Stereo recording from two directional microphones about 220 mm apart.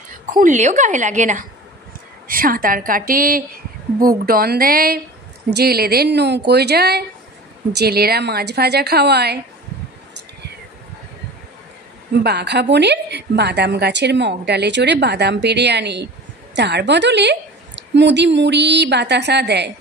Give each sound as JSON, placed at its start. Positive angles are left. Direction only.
{"t": 0.1, "sound": "a woman's voice", "side_deg": -35}
{"t": 12.2, "sound": "a woman's voice", "side_deg": -50}